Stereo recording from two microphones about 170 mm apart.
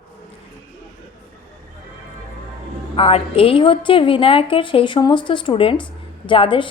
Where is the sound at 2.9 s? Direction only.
35° left (ahead or behind).